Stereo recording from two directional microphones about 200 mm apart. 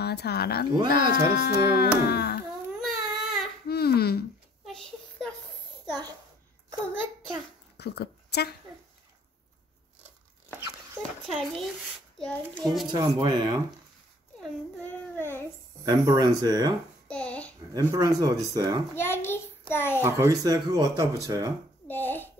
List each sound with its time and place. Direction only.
0.0 s chopping: 55° left (ahead or behind)
2.8 s baby cry: centre (ahead or behind)
3.6 s a sound: 50° left (ahead or behind)
4.6 s a sound: centre (ahead or behind)
7.7 s a woman's voice: 55° left (ahead or behind)
11.0 s a child's voice: centre (ahead or behind)
12.8 s speech: 20° right (ahead or behind)
14.4 s a sound: 10° left (ahead or behind)
15.8 s speech: 20° right (ahead or behind)
17.1 s a sound: 5° left (ahead or behind)
17.7 s speech: 20° right (ahead or behind)
18.9 s a child's voice: 10° left (ahead or behind)
20.0 s speech: 15° right (ahead or behind)
21.8 s a child's voice: 10° left (ahead or behind)